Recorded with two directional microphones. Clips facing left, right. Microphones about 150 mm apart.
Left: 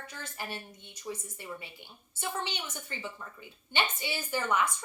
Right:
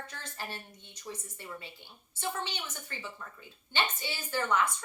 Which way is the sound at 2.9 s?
20° left (ahead or behind).